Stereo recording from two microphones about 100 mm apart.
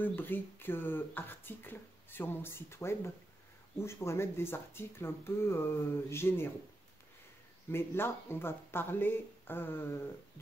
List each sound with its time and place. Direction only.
0.0 s speech: 20° left (ahead or behind)
7.7 s speech: 25° left (ahead or behind)